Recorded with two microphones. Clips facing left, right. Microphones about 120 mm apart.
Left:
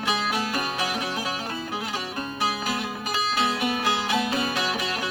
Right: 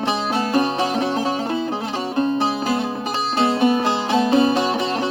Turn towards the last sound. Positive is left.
turn(degrees=-30)  # may be behind; listen again after turning